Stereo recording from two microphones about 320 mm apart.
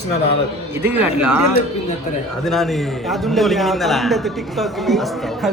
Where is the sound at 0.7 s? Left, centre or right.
Centre.